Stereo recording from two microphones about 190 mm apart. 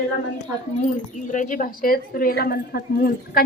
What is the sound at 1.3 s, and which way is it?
A woman's voice, 45° left (ahead or behind).